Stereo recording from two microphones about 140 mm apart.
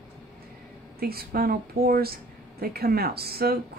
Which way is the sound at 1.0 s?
90° right.